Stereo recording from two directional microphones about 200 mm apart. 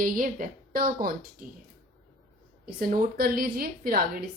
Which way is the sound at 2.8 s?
45° right (ahead or behind).